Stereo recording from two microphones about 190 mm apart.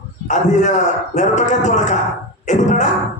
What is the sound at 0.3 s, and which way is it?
A man's voice, 40° left (ahead or behind).